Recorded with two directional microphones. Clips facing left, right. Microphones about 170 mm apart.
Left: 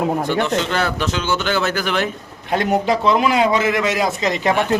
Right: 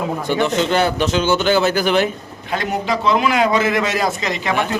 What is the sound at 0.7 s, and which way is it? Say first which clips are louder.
Speech: right 4 dB; 25° right (ahead or behind).